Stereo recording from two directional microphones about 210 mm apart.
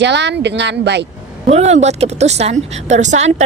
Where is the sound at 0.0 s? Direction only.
55° right (ahead or behind).